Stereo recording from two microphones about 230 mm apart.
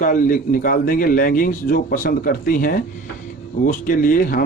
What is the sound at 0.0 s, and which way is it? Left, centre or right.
Speech, left.